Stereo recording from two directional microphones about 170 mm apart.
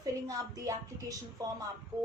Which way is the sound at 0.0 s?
20° right (ahead or behind).